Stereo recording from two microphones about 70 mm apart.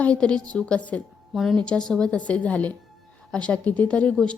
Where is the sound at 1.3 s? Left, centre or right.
Centre.